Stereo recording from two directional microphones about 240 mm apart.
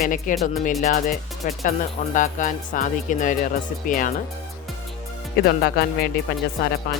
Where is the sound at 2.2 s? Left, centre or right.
Left.